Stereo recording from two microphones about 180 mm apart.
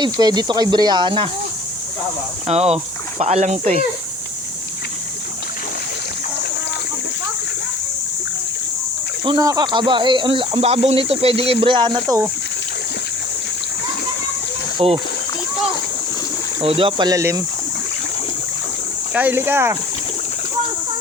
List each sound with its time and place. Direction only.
0.0 s speech: 20° right (ahead or behind)
2.5 s speech: 35° right (ahead or behind)
9.2 s speech: 20° right (ahead or behind)
14.8 s speech: 30° right (ahead or behind)
16.6 s speech: 30° right (ahead or behind)
19.1 s speech: 10° right (ahead or behind)